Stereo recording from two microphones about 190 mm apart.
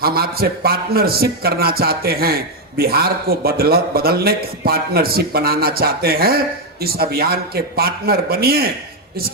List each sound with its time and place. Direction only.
0.0 s a man's voice: 55° right (ahead or behind)